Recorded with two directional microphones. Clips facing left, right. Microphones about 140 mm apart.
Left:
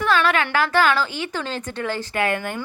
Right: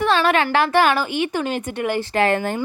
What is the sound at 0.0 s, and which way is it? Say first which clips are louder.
A woman's voice: right 2 dB; 25° right (ahead or behind).